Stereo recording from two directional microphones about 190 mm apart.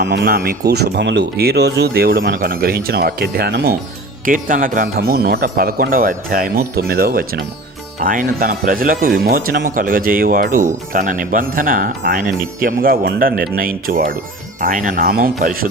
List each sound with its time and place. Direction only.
0.0 s speech: 60° right (ahead or behind)
4.3 s speech: 45° right (ahead or behind)
10.5 s speech: 15° right (ahead or behind)
10.9 s speech: 45° right (ahead or behind)